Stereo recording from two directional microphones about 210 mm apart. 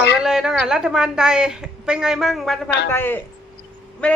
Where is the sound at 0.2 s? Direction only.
5° right (ahead or behind).